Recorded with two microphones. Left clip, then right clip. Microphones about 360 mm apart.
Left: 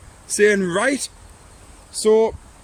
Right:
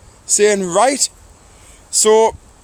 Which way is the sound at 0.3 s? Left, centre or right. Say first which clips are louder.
Right 4 dB; centre.